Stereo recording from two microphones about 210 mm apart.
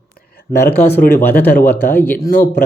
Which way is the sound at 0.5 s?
10° left (ahead or behind).